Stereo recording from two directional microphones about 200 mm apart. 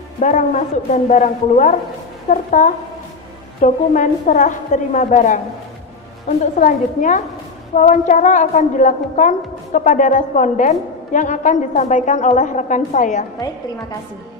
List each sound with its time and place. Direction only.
0.2 s a woman's voice: 40° left (ahead or behind)
6.6 s a woman's voice: 40° left (ahead or behind)